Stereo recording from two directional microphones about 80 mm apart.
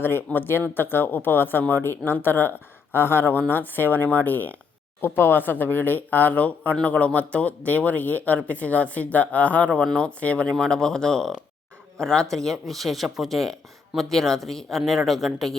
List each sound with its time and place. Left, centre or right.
0.0 s speech: left; by 15.5 s centre